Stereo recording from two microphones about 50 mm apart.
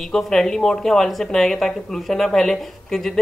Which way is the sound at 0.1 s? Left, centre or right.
Centre.